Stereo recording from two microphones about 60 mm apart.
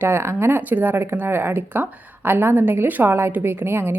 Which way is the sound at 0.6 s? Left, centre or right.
Right.